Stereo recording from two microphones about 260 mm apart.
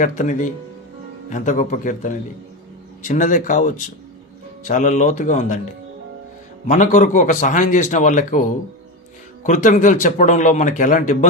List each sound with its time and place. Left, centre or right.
0.0 s speech: left
6.7 s speech: left